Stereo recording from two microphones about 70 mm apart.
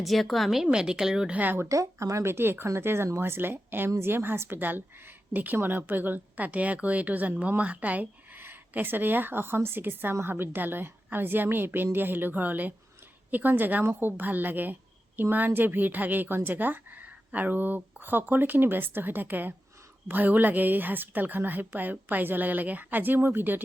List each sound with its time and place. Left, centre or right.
0.0 s speech: centre
1.4 s a woman's voice: right
1.6 s a woman's voice: right